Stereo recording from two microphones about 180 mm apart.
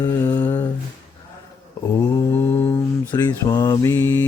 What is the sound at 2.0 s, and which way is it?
Mantra, 10° left (ahead or behind).